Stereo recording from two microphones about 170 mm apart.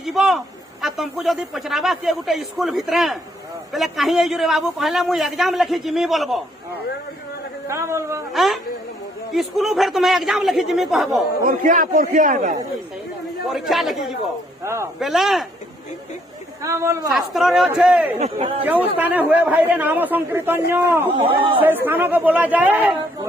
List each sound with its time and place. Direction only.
0.0 s a sound: centre (ahead or behind)
0.8 s a man's voice: centre (ahead or behind)
7.7 s a man's voice: 15° right (ahead or behind)
8.3 s a man's voice: centre (ahead or behind)
11.4 s a man's voice: 50° right (ahead or behind)
13.5 s a man's voice: centre (ahead or behind)
14.6 s a man's voice: 15° right (ahead or behind)
14.9 s a man's voice: centre (ahead or behind)
16.6 s a man's voice: 15° right (ahead or behind)
17.1 s a man's voice: centre (ahead or behind)
18.2 s speech: 35° right (ahead or behind)
18.6 s a man's voice: 10° right (ahead or behind)
21.1 s speech: 30° right (ahead or behind)
21.6 s a man's voice: 10° right (ahead or behind)